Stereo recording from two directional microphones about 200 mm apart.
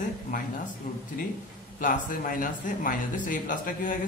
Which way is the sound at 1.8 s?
40° left (ahead or behind).